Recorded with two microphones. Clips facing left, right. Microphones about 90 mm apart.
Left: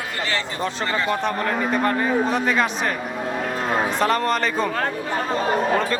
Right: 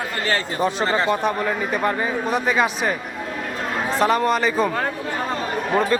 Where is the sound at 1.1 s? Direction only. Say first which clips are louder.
Right 1 dB; 10° right (ahead or behind).